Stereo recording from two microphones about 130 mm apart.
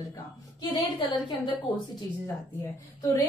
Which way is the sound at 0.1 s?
35° left (ahead or behind).